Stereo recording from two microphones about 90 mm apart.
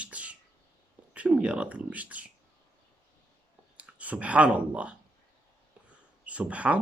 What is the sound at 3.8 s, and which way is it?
Speech, 15° right (ahead or behind).